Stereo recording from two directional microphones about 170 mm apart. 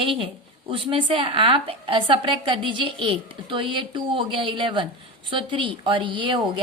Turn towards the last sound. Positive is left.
turn(degrees=-30)  # may be behind; listen again after turning